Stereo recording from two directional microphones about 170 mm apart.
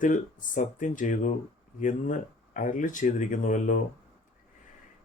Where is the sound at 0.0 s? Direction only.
50° left (ahead or behind).